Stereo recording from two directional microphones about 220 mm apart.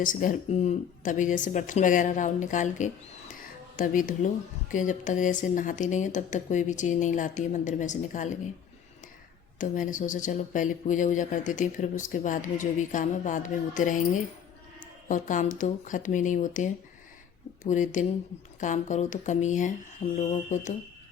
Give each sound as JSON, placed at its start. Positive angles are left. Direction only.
{"t": 0.0, "sound": "speech", "side_deg": 35}
{"t": 9.6, "sound": "speech", "side_deg": 35}
{"t": 15.1, "sound": "speech", "side_deg": 35}